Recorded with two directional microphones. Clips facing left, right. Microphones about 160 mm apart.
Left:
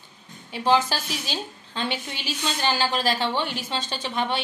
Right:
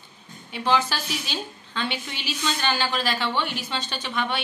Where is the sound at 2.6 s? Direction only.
35° left (ahead or behind).